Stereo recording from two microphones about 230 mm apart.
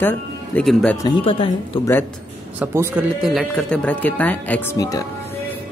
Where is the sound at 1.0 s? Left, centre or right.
Left.